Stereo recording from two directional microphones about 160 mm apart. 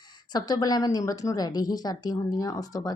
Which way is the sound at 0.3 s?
25° left (ahead or behind).